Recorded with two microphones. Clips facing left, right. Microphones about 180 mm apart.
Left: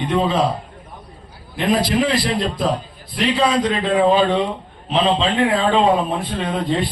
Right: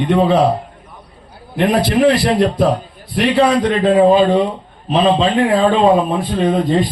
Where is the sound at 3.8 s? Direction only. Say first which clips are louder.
Right 6 dB; 40° right (ahead or behind).